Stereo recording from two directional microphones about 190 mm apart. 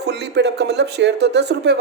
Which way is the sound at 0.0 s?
60° right (ahead or behind).